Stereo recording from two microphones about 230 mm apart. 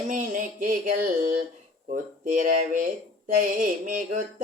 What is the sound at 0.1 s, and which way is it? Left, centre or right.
Music, right.